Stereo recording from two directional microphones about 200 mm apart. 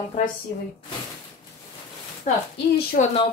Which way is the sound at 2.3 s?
35° left (ahead or behind).